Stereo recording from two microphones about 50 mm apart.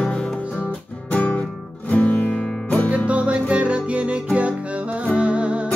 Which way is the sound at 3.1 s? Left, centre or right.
Right.